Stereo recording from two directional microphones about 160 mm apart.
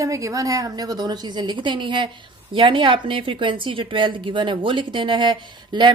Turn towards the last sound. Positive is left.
turn(degrees=-30)  # may be behind; listen again after turning